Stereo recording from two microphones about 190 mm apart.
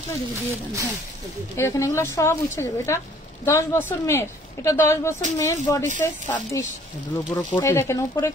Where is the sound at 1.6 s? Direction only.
15° left (ahead or behind).